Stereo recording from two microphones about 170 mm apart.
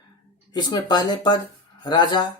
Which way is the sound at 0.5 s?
25° left (ahead or behind).